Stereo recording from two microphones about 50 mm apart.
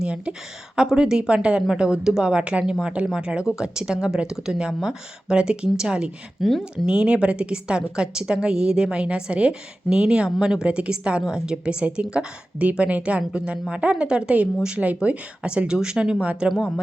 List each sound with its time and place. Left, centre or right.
0.0 s a woman's voice: centre
6.4 s speech: centre
6.8 s a woman's voice: centre
16.2 s a woman's voice: right